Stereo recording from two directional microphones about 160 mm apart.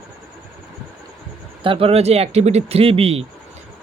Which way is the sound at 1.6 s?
35° right (ahead or behind).